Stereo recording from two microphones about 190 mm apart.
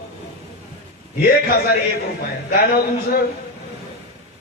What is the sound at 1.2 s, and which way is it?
Speech, 55° left (ahead or behind).